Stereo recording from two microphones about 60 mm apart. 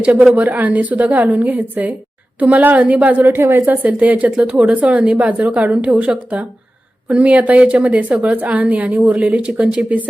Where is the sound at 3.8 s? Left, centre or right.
Right.